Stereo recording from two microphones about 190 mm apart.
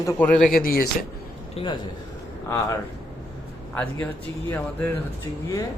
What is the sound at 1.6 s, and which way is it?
Speech, 30° left (ahead or behind).